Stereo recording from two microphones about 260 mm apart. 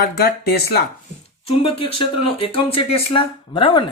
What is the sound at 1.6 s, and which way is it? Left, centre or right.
Speech, left.